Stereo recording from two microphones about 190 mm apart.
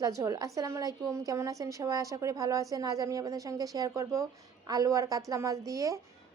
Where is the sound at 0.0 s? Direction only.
20° right (ahead or behind).